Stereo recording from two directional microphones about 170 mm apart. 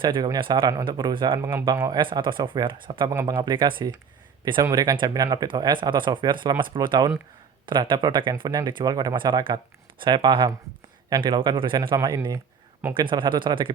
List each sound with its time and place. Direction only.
0.0 s speech: 25° right (ahead or behind)
1.4 s speech: 15° right (ahead or behind)
3.1 s speech: 15° right (ahead or behind)
3.3 s speech: 25° right (ahead or behind)